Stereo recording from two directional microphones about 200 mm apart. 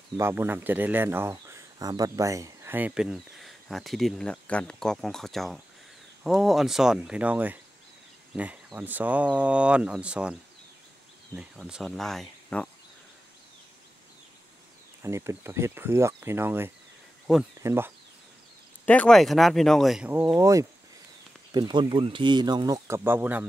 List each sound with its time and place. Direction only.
0.2 s speech: 10° right (ahead or behind)
11.3 s speech: 5° right (ahead or behind)
15.0 s speech: 15° right (ahead or behind)
18.9 s speech: 5° left (ahead or behind)